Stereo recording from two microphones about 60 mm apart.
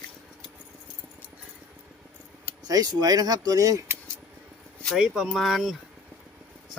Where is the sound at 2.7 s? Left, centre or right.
Right.